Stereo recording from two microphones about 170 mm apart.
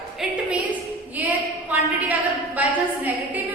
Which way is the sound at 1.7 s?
10° right (ahead or behind).